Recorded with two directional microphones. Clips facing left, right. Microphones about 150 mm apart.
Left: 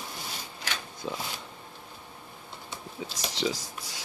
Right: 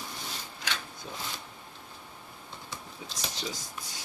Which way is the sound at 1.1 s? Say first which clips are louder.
Left 9 dB; 90° left.